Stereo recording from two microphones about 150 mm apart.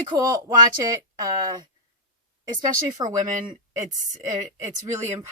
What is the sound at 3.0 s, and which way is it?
Speech, 30° right (ahead or behind).